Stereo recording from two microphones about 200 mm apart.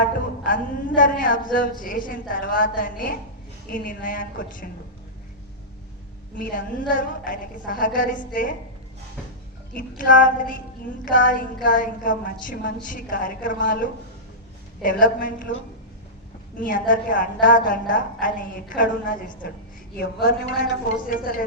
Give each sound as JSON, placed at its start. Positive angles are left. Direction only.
{"t": 0.4, "sound": "a woman's voice", "side_deg": 40}
{"t": 6.4, "sound": "a woman's voice", "side_deg": 45}
{"t": 10.1, "sound": "a woman's voice", "side_deg": 40}
{"t": 16.6, "sound": "a woman's voice", "side_deg": 40}
{"t": 20.0, "sound": "a woman's voice", "side_deg": 55}